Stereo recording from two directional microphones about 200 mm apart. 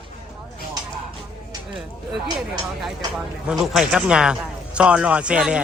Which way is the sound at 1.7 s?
Centre (ahead or behind).